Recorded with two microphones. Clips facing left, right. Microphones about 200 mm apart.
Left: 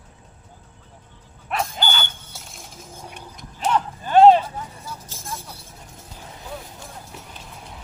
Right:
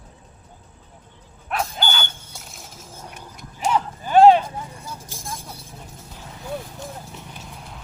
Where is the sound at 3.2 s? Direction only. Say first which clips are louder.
Even; 10° right (ahead or behind).